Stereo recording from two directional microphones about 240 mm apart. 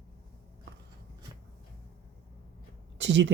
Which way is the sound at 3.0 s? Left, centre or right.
Right.